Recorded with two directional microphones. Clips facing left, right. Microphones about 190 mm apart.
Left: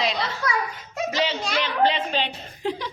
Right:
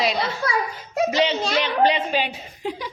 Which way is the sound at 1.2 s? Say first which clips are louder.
Right 2 dB; 25° right (ahead or behind).